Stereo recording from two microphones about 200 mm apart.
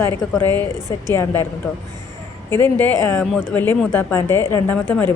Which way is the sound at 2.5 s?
10° left (ahead or behind).